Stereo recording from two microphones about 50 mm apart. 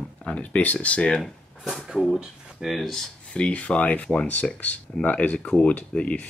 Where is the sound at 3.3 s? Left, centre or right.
Left.